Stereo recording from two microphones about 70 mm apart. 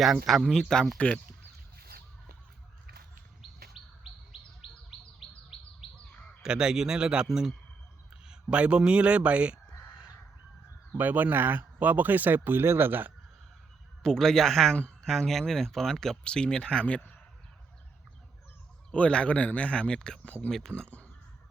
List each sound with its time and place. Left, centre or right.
0.0 s speech: centre
0.9 s speech: left
6.4 s a man's voice: centre
8.3 s a man's voice: centre
10.9 s speech: right
14.0 s speech: centre
18.9 s speech: centre